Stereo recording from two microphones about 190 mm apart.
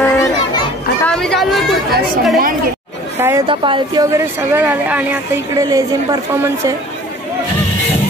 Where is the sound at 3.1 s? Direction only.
15° right (ahead or behind).